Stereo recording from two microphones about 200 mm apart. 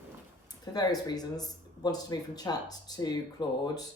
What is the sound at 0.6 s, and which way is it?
Speech, 20° left (ahead or behind).